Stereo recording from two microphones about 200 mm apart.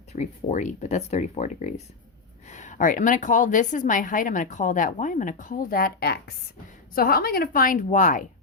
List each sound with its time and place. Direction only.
0.1 s a woman's voice: 35° left (ahead or behind)